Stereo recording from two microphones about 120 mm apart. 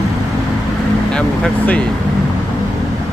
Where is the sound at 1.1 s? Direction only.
10° left (ahead or behind).